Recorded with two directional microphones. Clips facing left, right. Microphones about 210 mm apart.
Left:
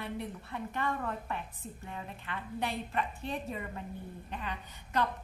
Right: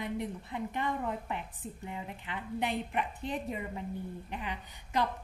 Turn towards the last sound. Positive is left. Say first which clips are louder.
# right 1 dB
turn(degrees=-15)  # may be behind; listen again after turning